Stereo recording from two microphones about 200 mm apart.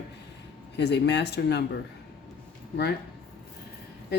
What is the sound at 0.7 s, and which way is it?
Speech, 55° left (ahead or behind).